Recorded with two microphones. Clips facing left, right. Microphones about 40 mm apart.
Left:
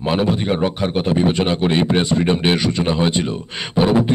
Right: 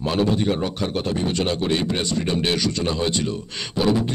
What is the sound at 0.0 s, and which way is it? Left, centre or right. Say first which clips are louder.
Speech: left 2 dB; left.